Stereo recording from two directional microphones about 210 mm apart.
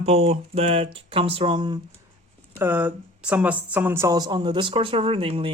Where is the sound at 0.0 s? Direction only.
30° right (ahead or behind).